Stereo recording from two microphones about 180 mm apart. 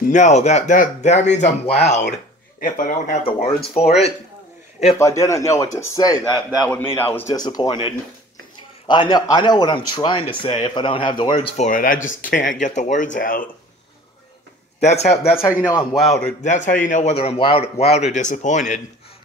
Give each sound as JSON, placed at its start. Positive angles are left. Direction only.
{"t": 0.0, "sound": "speech", "side_deg": 40}
{"t": 3.3, "sound": "speech", "side_deg": 35}
{"t": 4.9, "sound": "a man's voice", "side_deg": 15}
{"t": 11.3, "sound": "speech", "side_deg": 40}
{"t": 14.8, "sound": "speech", "side_deg": 40}
{"t": 15.6, "sound": "a man's voice", "side_deg": 15}
{"t": 15.9, "sound": "a man's voice", "side_deg": 0}
{"t": 16.4, "sound": "speech", "side_deg": 45}